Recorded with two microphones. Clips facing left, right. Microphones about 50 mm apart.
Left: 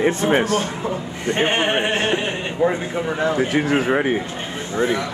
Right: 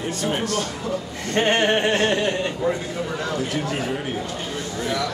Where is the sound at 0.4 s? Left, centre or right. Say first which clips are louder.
Left 5 dB; left.